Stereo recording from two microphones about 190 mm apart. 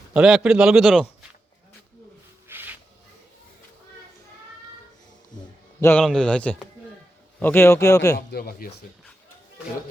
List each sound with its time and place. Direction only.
0.1 s a man's voice: 5° right (ahead or behind)
2.5 s rub: 10° right (ahead or behind)
5.8 s speech: 5° left (ahead or behind)
8.3 s speech: 55° left (ahead or behind)